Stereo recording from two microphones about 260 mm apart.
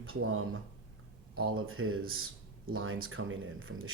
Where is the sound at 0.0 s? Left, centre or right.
Right.